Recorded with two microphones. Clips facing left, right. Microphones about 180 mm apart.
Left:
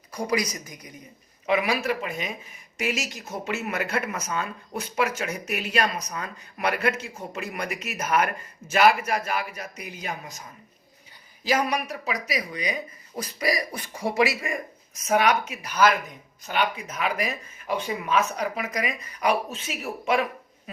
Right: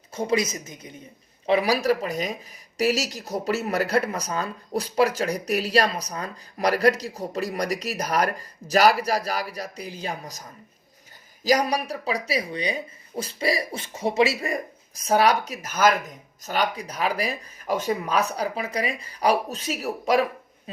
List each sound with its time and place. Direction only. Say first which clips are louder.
0.1 s speech: right 3 dB; 25° right (ahead or behind)
11.4 s speech: right 3 dB; 35° right (ahead or behind)
14.4 s speech: right 3 dB; 35° right (ahead or behind)